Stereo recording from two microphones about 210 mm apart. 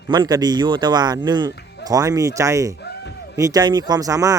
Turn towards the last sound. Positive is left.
turn(degrees=-15)  # may be behind; listen again after turning